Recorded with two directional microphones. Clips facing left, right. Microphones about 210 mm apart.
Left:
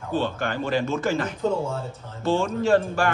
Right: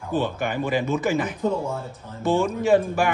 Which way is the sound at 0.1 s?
15° right (ahead or behind).